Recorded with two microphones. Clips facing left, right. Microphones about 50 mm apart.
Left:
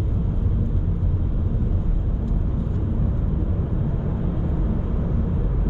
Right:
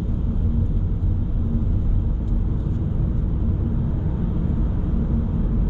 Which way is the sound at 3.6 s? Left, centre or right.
Centre.